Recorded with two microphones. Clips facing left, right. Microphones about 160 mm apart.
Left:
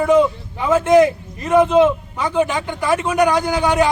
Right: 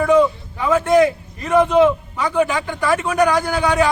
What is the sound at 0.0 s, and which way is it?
A man's voice, 20° left (ahead or behind).